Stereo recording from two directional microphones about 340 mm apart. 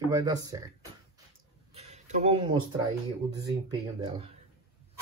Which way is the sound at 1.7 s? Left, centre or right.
Centre.